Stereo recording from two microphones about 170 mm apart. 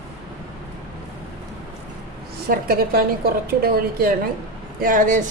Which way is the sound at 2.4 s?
60° right (ahead or behind).